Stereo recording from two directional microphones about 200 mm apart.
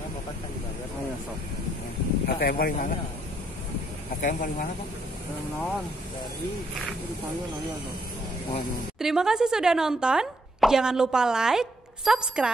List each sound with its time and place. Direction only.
2.2 s speech: 50° left (ahead or behind)
4.2 s speech: 40° left (ahead or behind)
9.0 s speech: 5° right (ahead or behind)